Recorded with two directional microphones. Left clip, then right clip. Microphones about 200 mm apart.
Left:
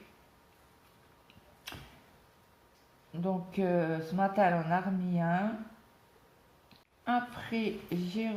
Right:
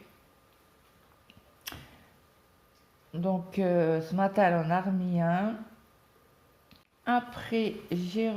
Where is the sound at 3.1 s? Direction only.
40° right (ahead or behind).